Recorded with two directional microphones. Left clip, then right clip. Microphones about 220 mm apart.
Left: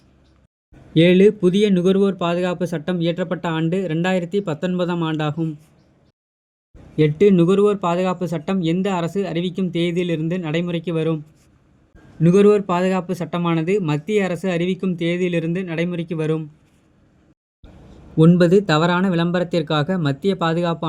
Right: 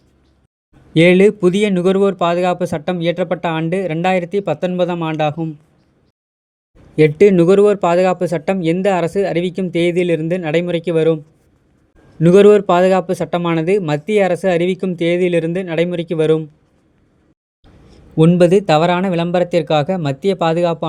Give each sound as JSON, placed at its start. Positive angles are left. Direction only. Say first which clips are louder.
{"t": 0.9, "sound": "speech", "louder": "right 3 dB", "side_deg": -30}
{"t": 6.9, "sound": "speech", "louder": "right 5 dB", "side_deg": -30}
{"t": 12.2, "sound": "speech", "louder": "right 6 dB", "side_deg": -30}
{"t": 18.2, "sound": "speech", "louder": "right 4 dB", "side_deg": -25}